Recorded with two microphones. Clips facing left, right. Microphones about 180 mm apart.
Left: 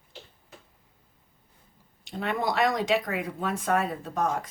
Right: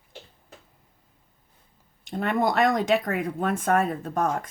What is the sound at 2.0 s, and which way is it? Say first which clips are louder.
Speech: right 4 dB; 50° right (ahead or behind).